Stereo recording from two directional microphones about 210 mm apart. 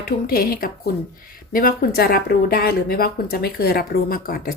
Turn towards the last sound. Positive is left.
turn(degrees=45)  # may be behind; listen again after turning